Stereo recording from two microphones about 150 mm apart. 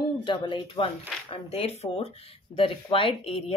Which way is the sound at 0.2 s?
30° left (ahead or behind).